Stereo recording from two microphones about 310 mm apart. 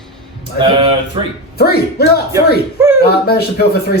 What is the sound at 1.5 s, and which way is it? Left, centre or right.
Speech, left.